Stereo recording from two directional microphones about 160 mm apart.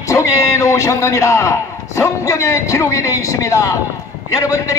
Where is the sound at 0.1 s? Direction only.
20° left (ahead or behind).